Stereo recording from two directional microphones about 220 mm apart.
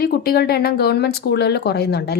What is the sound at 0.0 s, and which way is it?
A woman's voice, 45° left (ahead or behind).